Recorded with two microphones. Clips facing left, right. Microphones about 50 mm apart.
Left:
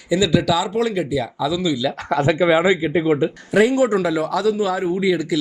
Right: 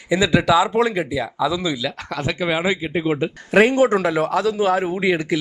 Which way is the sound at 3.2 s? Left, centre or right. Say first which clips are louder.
Right 1 dB; right.